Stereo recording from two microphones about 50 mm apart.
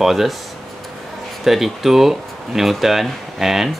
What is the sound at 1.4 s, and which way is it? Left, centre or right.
Speech, centre.